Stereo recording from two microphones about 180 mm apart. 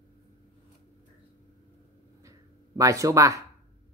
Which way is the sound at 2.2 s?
15° right (ahead or behind).